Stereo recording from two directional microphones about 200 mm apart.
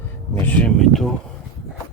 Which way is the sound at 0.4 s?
5° left (ahead or behind).